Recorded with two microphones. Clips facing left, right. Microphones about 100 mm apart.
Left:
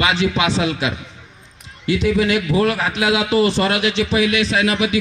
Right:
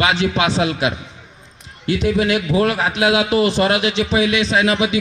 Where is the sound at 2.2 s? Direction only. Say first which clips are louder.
Even; 20° right (ahead or behind).